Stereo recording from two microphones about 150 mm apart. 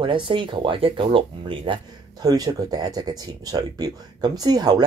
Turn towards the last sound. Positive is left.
turn(degrees=-25)  # may be behind; listen again after turning